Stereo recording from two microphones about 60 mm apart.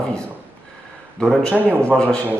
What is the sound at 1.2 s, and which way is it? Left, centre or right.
Speech, centre.